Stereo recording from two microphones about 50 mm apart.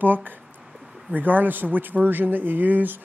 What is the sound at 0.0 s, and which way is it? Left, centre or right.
Speech, right.